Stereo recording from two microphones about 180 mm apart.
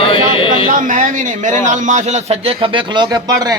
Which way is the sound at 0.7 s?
45° right (ahead or behind).